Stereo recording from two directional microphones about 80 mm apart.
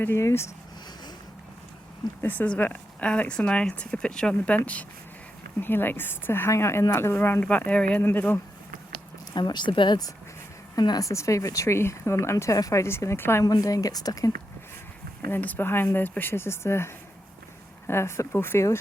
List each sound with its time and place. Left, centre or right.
0.2 s speech: left
2.2 s speech: left
7.4 s speech: centre
9.3 s speech: left
10.8 s a woman's voice: left
11.1 s speech: left
13.4 s a woman's voice: left
15.3 s speech: left